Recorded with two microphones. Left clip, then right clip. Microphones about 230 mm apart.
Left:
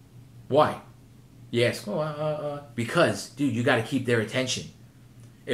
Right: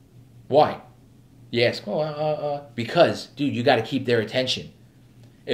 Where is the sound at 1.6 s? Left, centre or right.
Centre.